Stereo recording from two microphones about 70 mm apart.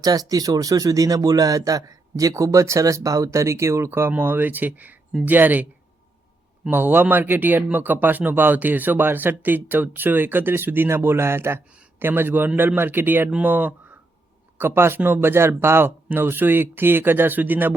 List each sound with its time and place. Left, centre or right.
0.0 s speech: right
4.2 s speech: right
6.7 s speech: right
14.6 s speech: right